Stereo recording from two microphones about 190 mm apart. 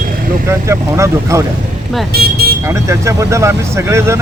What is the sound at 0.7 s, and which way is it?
Speech, 15° right (ahead or behind).